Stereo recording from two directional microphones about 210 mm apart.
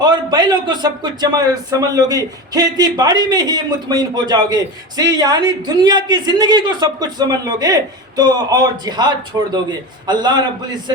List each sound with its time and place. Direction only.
0.0 s speech: 20° right (ahead or behind)